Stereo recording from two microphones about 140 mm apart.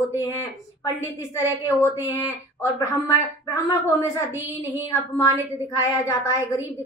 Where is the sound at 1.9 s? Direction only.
15° right (ahead or behind).